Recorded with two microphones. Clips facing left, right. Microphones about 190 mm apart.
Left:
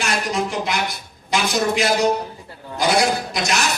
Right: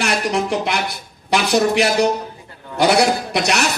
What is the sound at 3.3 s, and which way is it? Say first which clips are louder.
Speech: right 4 dB; 65° right (ahead or behind).